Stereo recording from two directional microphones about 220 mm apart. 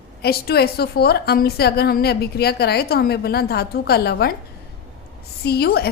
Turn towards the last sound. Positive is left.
turn(degrees=45)  # may be behind; listen again after turning